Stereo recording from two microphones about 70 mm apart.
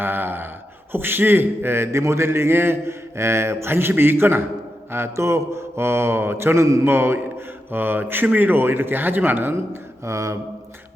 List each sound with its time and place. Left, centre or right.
0.0 s a sound: right
0.9 s mantra: right
10.0 s mantra: right